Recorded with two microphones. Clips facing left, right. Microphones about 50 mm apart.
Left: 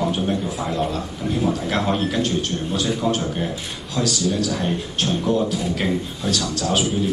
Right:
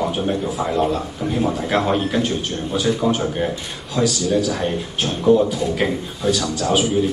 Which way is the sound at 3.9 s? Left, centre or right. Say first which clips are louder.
Right 4 dB; centre.